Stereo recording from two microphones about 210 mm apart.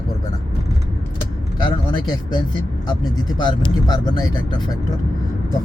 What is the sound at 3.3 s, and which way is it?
Speech, 20° left (ahead or behind).